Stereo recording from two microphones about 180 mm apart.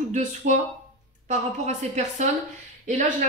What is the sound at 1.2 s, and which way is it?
Speech, 40° right (ahead or behind).